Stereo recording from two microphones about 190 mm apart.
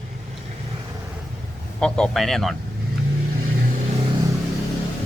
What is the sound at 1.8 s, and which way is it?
Speech, 5° left (ahead or behind).